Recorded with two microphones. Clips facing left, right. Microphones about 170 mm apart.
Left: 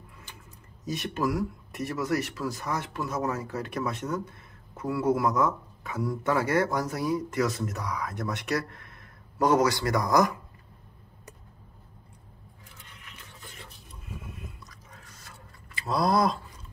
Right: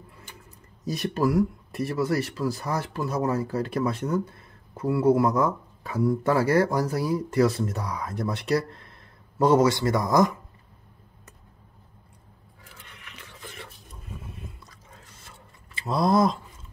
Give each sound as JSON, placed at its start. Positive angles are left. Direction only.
{"t": 0.8, "sound": "speech", "side_deg": -35}
{"t": 12.8, "sound": "a sound", "side_deg": -70}
{"t": 14.3, "sound": "chewing", "side_deg": -30}